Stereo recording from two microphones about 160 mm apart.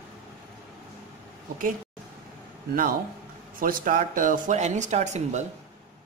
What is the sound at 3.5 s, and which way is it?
Speech, 60° right (ahead or behind).